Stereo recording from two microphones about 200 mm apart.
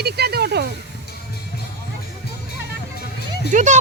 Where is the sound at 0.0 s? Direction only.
55° right (ahead or behind).